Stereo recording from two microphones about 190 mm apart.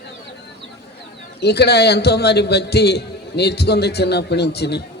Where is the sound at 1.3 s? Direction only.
60° left (ahead or behind).